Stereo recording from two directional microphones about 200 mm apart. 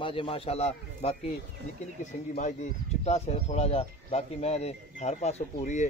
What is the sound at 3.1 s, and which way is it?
Speech, 35° left (ahead or behind).